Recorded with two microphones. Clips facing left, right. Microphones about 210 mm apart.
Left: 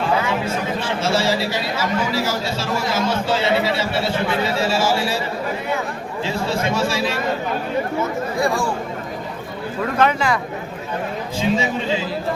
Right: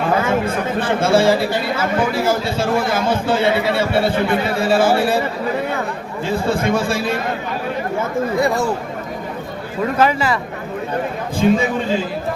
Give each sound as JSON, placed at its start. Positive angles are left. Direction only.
{"t": 0.2, "sound": "speech", "side_deg": -55}
{"t": 6.2, "sound": "a man's voice", "side_deg": -55}
{"t": 8.4, "sound": "speech", "side_deg": -20}
{"t": 10.0, "sound": "speech", "side_deg": -5}
{"t": 11.3, "sound": "a man's voice", "side_deg": -55}